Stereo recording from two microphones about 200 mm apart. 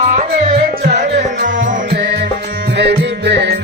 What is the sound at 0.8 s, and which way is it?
Tabla, 55° right (ahead or behind).